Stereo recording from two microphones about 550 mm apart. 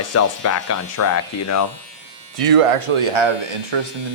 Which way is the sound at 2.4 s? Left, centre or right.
Right.